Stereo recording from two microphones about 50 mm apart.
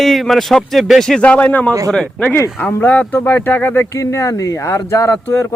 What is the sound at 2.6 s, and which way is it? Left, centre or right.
Speech, left.